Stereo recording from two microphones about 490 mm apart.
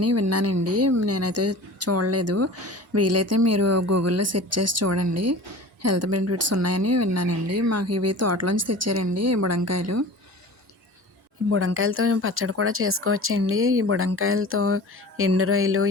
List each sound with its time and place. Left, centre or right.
0.0 s speech: right
11.5 s speech: right